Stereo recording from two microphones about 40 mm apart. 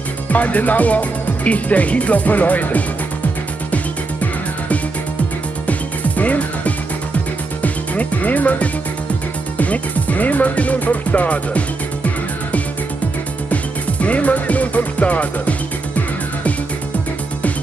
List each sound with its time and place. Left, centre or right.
0.3 s speech: left
3.7 s music: left
7.6 s speech: left
9.6 s music: left
13.5 s music: left